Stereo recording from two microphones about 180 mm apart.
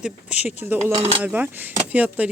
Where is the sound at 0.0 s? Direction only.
5° right (ahead or behind).